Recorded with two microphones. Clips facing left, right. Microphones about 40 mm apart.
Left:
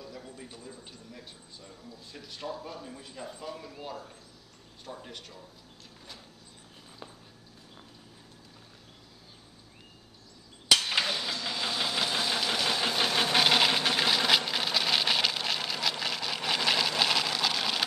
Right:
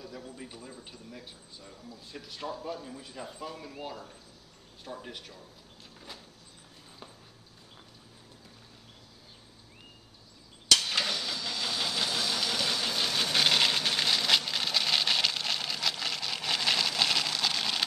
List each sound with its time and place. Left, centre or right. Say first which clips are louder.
0.0 s a man's voice: right 1 dB; centre
4.8 s a man's voice: right 1 dB; centre
10.7 s engine: left 1 dB; centre
13.4 s a sound: left 1 dB; centre